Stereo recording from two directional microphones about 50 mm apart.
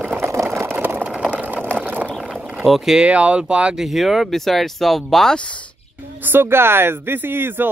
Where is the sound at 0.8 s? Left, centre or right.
Right.